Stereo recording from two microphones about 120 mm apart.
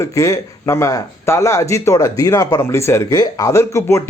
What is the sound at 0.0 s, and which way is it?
Speech, 25° left (ahead or behind).